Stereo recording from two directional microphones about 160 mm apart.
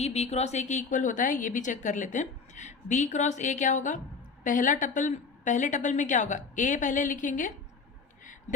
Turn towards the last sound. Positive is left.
turn(degrees=50)  # may be behind; listen again after turning